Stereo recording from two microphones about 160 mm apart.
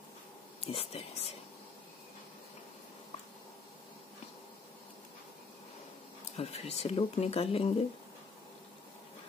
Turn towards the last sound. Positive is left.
turn(degrees=40)  # may be behind; listen again after turning